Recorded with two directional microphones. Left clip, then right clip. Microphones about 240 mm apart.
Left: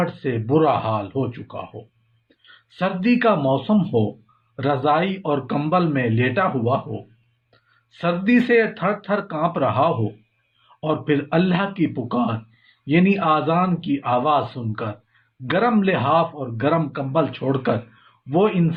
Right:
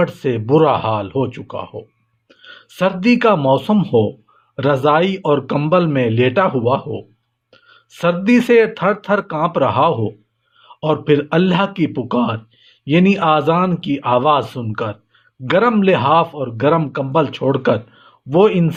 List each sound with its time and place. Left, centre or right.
0.0 s speech: right